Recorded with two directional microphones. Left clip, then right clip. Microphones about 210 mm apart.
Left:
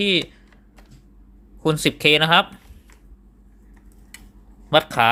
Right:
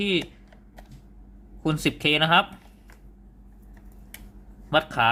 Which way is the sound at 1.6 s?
20° left (ahead or behind).